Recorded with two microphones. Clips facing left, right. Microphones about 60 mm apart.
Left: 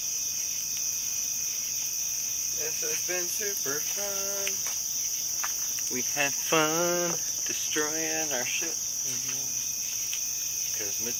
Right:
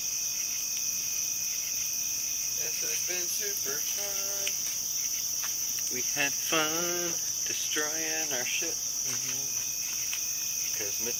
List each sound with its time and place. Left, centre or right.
6.1 s speech: centre
7.8 s speech: centre